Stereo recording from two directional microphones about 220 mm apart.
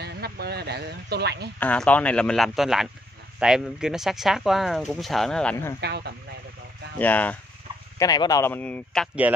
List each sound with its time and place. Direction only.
0.0 s a sound: 45° right (ahead or behind)
1.6 s speech: 5° left (ahead or behind)
5.8 s speech: 50° right (ahead or behind)
7.0 s speech: 5° left (ahead or behind)